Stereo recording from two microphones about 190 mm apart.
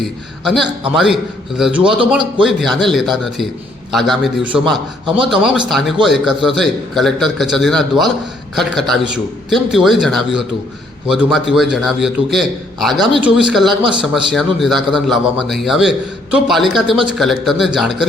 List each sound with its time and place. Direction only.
0.4 s a man's voice: centre (ahead or behind)
1.8 s a man's voice: 25° right (ahead or behind)
2.0 s a man's voice: 5° right (ahead or behind)